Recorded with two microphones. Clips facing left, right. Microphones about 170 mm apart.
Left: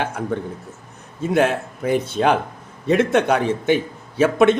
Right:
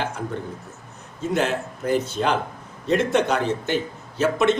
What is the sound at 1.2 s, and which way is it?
A man's voice, 55° left (ahead or behind).